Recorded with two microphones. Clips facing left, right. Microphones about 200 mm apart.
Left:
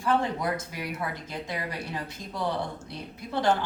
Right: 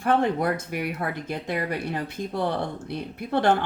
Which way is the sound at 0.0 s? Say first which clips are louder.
Right 4 dB; 60° right (ahead or behind).